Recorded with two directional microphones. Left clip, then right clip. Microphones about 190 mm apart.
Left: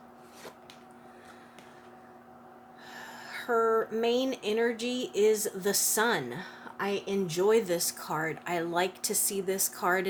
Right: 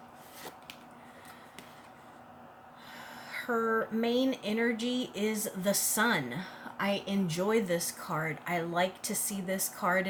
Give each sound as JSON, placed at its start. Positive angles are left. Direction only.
{"t": 2.9, "sound": "speech", "side_deg": 45}